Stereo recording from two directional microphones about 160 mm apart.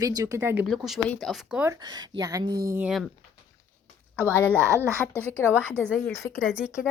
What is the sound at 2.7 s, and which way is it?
Speech, 10° right (ahead or behind).